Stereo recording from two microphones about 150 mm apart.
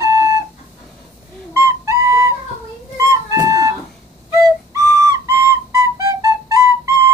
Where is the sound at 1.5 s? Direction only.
20° right (ahead or behind).